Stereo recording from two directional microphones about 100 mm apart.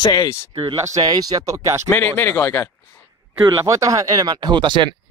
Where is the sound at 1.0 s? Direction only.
40° right (ahead or behind).